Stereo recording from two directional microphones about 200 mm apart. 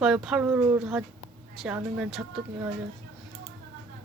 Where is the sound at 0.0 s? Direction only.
5° right (ahead or behind).